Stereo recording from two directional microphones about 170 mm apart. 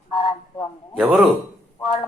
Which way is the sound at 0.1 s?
30° left (ahead or behind).